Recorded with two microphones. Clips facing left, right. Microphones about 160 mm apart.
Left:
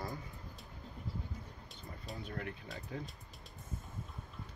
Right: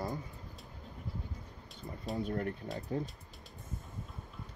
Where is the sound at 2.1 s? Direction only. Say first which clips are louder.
Right 9 dB; 40° right (ahead or behind).